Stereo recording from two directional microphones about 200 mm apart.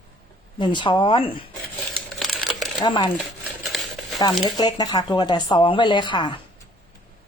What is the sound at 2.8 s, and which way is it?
Speech, 25° left (ahead or behind).